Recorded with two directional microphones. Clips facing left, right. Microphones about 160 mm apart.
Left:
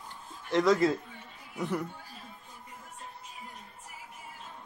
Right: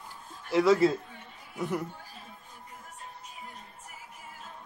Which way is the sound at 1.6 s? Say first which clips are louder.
Right 1 dB; 10° right (ahead or behind).